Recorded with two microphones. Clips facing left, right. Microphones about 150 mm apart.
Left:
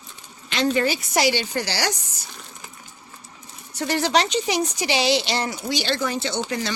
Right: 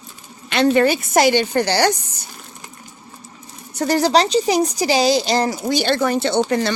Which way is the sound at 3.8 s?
40° right (ahead or behind).